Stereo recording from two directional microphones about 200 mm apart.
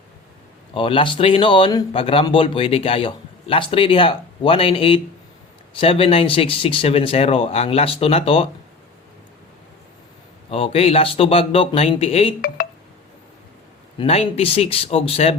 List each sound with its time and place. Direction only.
0.7 s speech: 25° left (ahead or behind)
10.5 s speech: 30° left (ahead or behind)
14.0 s speech: 30° left (ahead or behind)